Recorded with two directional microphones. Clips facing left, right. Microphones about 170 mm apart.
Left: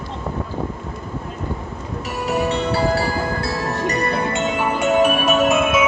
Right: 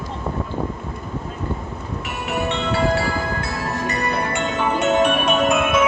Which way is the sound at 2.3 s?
35° left (ahead or behind).